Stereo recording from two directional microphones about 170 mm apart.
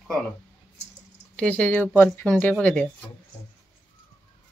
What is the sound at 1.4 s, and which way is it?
Speech, 10° left (ahead or behind).